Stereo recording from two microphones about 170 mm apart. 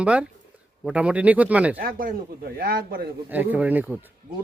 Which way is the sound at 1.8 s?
60° right (ahead or behind).